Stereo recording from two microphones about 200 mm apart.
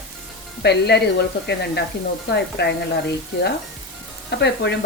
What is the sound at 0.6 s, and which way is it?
Speech, 55° left (ahead or behind).